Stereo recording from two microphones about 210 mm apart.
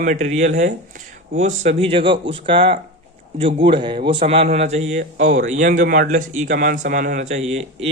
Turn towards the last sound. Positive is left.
turn(degrees=-30)  # may be behind; listen again after turning